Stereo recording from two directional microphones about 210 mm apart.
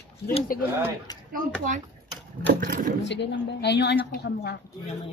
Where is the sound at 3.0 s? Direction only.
55° left (ahead or behind).